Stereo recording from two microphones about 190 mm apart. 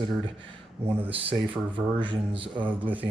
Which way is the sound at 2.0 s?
25° right (ahead or behind).